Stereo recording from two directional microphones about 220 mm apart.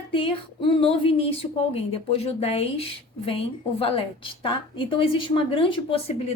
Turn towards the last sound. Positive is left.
turn(degrees=25)  # may be behind; listen again after turning